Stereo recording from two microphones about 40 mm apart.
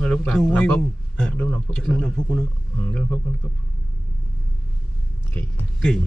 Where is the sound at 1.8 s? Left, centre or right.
Left.